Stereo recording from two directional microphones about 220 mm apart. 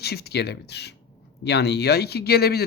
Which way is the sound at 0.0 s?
45° left (ahead or behind).